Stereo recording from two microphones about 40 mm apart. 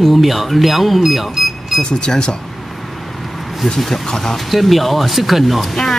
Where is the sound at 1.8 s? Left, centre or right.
Centre.